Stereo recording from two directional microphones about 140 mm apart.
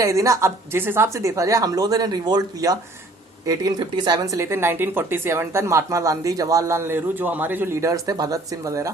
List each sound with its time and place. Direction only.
0.0 s speech: 20° right (ahead or behind)